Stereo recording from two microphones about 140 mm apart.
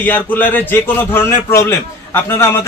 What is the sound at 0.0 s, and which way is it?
A man's voice, 15° left (ahead or behind).